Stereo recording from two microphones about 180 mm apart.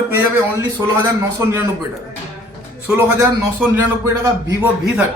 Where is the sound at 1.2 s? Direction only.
15° right (ahead or behind).